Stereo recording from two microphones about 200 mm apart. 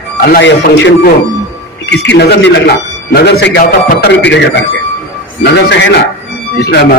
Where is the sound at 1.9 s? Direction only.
60° left (ahead or behind).